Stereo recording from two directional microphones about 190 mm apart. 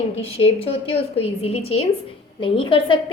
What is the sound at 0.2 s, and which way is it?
A woman's voice, 30° left (ahead or behind).